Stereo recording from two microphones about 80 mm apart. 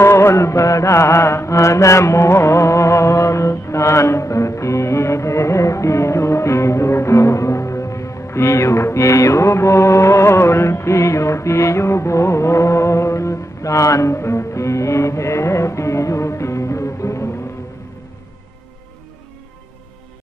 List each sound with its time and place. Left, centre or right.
0.0 s mantra: left